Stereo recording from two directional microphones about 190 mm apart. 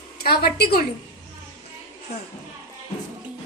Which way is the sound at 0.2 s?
55° left (ahead or behind).